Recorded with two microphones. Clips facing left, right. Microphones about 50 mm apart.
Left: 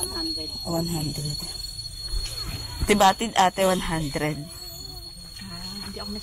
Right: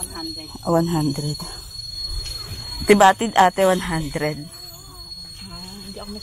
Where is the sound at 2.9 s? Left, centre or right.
Right.